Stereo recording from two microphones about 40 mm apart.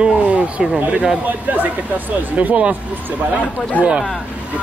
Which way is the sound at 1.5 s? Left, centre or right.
Right.